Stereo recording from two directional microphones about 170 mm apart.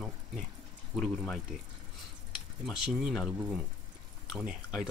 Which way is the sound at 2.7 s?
5° right (ahead or behind).